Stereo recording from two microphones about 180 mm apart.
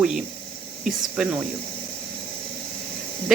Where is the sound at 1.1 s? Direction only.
5° right (ahead or behind).